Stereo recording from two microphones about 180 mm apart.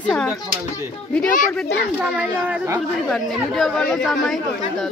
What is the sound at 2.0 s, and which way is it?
Speech, 10° right (ahead or behind).